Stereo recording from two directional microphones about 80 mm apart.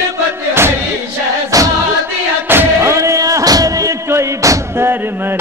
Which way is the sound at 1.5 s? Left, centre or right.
Right.